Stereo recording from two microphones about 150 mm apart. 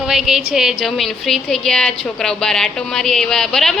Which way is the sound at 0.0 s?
Centre (ahead or behind).